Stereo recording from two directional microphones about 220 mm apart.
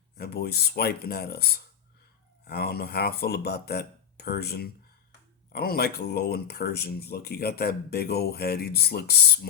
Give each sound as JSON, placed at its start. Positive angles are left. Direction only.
{"t": 0.2, "sound": "speech", "side_deg": 45}